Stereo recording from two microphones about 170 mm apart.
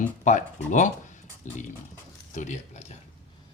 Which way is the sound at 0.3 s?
45° left (ahead or behind).